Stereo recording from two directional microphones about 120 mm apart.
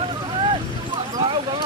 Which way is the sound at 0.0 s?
45° right (ahead or behind).